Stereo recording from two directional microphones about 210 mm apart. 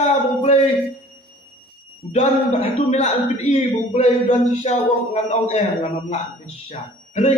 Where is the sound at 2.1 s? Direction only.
30° left (ahead or behind).